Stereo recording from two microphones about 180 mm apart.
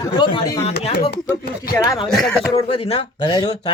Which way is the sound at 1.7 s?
15° left (ahead or behind).